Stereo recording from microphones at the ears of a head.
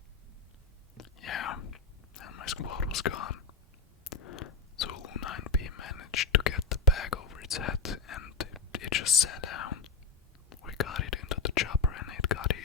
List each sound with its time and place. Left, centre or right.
0.9 s whispering: left